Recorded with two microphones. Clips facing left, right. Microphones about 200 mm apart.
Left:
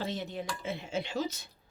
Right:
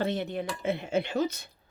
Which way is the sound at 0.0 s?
60° right (ahead or behind).